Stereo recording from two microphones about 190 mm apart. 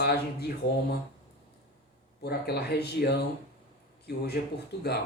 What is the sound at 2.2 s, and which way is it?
Speech, 55° left (ahead or behind).